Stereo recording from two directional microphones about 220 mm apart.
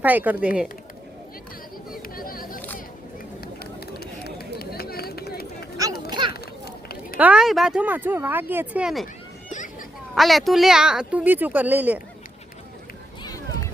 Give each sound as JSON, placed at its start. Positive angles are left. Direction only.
{"t": 0.0, "sound": "speech", "side_deg": -10}
{"t": 1.9, "sound": "chatter", "side_deg": 40}
{"t": 3.4, "sound": "a sound", "side_deg": 45}
{"t": 6.1, "sound": "children playing", "side_deg": -20}
{"t": 7.2, "sound": "speech", "side_deg": -5}
{"t": 10.2, "sound": "speech", "side_deg": 0}